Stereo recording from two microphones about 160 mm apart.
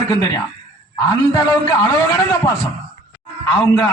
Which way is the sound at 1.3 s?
20° left (ahead or behind).